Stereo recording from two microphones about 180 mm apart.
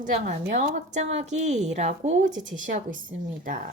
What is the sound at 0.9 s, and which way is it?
A woman's voice, 40° right (ahead or behind).